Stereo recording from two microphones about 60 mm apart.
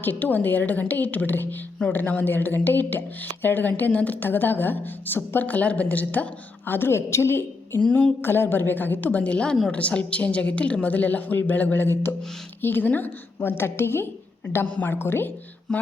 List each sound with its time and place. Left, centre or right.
0.0 s a woman's voice: left
15.7 s speech: centre